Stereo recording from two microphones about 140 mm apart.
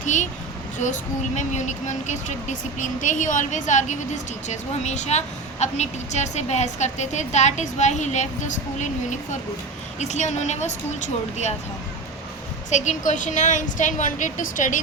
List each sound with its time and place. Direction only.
0.0 s a sound: 60° left (ahead or behind)
1.4 s speech: 55° left (ahead or behind)
12.7 s speech: 55° left (ahead or behind)